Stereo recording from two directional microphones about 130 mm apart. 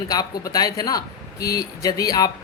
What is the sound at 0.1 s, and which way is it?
A man's voice, 30° left (ahead or behind).